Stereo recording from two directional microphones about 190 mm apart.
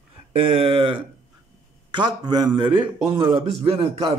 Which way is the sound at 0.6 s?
30° right (ahead or behind).